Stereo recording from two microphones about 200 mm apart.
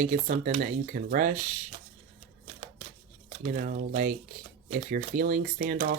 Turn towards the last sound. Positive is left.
turn(degrees=-45)  # may be behind; listen again after turning